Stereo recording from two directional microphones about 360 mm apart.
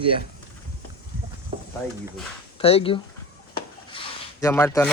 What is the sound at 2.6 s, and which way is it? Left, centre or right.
A man's voice, centre.